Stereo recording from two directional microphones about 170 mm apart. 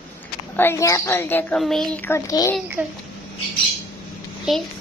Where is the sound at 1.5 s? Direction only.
Centre (ahead or behind); by 2.6 s 20° left (ahead or behind).